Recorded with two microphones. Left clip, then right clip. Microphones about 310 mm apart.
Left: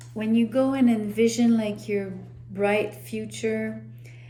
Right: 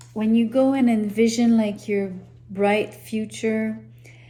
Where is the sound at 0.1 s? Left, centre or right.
Centre.